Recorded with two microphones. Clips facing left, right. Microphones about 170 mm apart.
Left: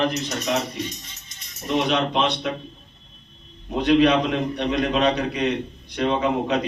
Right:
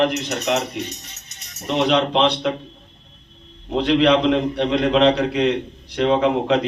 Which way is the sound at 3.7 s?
70° right (ahead or behind).